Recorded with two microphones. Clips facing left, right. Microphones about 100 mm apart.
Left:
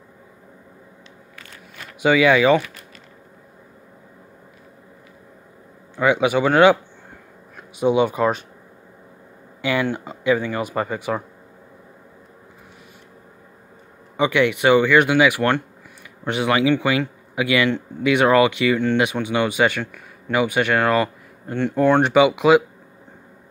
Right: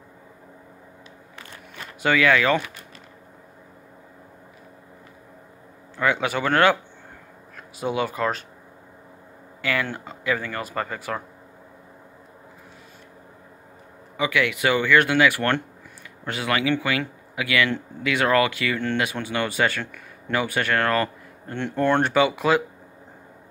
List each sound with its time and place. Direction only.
2.0 s speech: 15° left (ahead or behind)
5.9 s speech: 15° left (ahead or behind)
9.6 s speech: 20° left (ahead or behind)
14.1 s speech: 25° left (ahead or behind)